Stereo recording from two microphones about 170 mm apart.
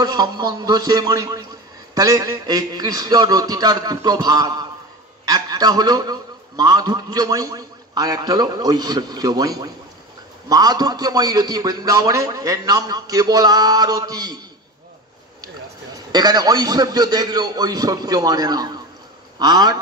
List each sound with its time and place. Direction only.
0.0 s a man's voice: 25° right (ahead or behind)
16.1 s a man's voice: 25° right (ahead or behind)